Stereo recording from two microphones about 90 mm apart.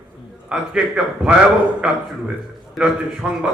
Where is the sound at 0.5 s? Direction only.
10° right (ahead or behind).